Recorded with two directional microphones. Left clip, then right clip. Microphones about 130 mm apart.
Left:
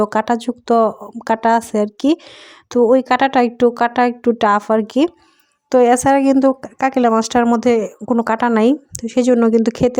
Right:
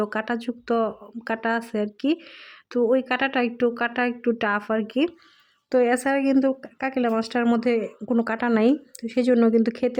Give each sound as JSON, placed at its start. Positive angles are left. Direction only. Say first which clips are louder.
{"t": 0.0, "sound": "a woman's voice", "louder": "left 10 dB", "side_deg": 45}